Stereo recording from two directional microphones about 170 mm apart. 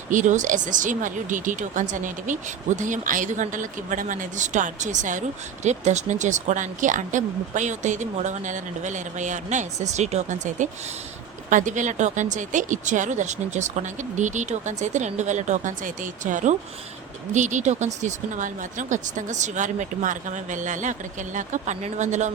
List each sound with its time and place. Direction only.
0.1 s speech: 45° right (ahead or behind)